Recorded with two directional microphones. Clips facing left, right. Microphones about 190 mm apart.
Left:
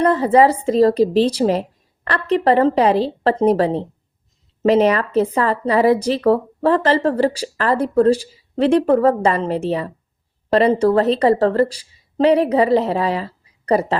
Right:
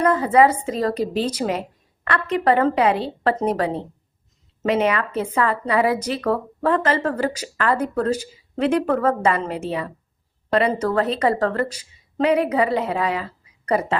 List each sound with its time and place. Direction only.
0.0 s speech: 35° left (ahead or behind)